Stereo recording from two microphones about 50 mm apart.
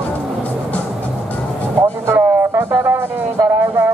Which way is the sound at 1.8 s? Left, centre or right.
Right.